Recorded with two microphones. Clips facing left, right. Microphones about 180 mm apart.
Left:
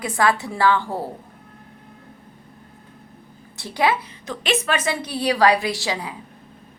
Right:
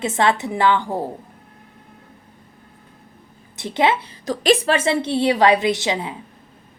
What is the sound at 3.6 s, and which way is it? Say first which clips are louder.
Speech: right 2 dB; 20° right (ahead or behind).